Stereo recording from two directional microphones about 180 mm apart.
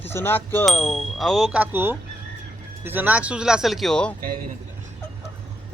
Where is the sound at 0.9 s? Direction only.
Centre (ahead or behind).